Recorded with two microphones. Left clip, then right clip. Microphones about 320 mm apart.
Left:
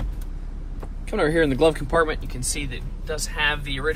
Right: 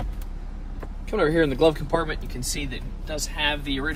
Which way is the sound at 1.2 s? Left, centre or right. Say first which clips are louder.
Left 1 dB; left.